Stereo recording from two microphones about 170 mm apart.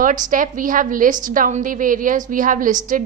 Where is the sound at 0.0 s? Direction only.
50° right (ahead or behind).